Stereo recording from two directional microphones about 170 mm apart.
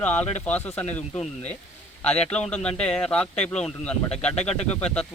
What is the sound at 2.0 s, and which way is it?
Speech, 5° left (ahead or behind).